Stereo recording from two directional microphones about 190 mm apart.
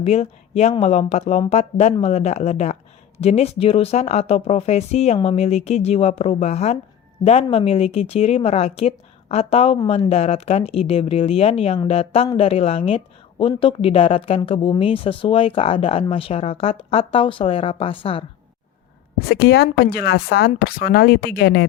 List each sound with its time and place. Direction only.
0.0 s speech: 35° left (ahead or behind)
19.3 s speech: 60° left (ahead or behind)